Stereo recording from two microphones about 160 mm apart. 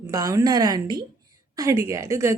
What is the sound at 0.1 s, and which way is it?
Speech, 20° right (ahead or behind).